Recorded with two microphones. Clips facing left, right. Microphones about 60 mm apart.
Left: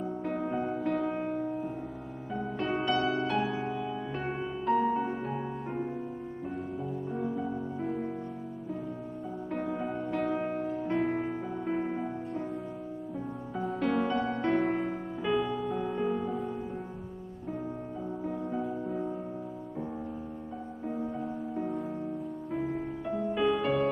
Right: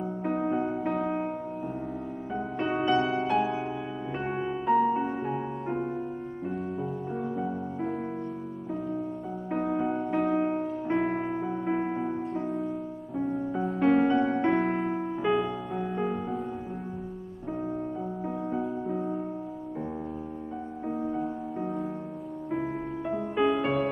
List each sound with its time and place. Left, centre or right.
0.2 s music: right
3.3 s music: centre
4.2 s music: centre
9.5 s music: centre
9.8 s music: centre
13.6 s music: centre
13.9 s music: right
15.2 s music: centre
18.2 s music: centre
21.0 s music: centre
22.7 s music: centre
23.3 s music: centre
23.6 s music: centre